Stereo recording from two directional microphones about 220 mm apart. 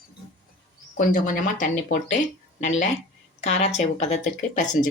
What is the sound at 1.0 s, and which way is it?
Speech, 40° left (ahead or behind).